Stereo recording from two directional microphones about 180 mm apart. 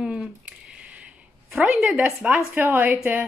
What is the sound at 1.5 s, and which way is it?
Speech, 5° right (ahead or behind).